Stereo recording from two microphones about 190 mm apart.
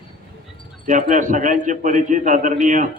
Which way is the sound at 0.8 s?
40° right (ahead or behind).